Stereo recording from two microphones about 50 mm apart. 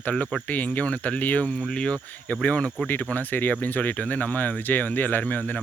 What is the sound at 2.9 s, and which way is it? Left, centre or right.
Speech, left.